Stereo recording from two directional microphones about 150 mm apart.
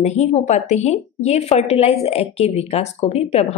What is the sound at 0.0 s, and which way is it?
A woman's voice, 45° left (ahead or behind).